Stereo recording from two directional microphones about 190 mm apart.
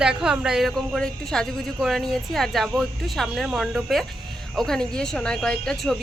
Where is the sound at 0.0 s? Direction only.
5° right (ahead or behind).